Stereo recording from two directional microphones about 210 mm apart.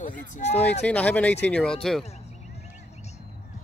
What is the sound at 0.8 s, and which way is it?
Speech, 5° left (ahead or behind).